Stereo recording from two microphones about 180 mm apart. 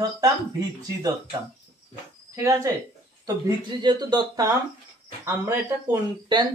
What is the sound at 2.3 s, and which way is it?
Speech, 15° right (ahead or behind).